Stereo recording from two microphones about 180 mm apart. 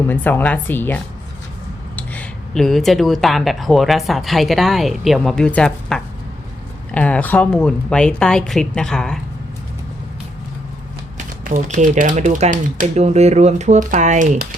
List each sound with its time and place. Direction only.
0.1 s speech: 10° left (ahead or behind)
11.4 s speech: 45° right (ahead or behind)